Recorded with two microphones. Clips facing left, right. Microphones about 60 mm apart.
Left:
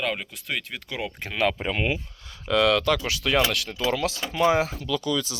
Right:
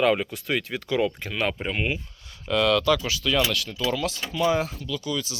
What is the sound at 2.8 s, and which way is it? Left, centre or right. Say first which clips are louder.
Speech: right 1 dB; left.